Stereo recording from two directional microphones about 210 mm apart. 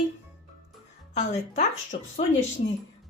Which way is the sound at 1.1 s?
35° left (ahead or behind).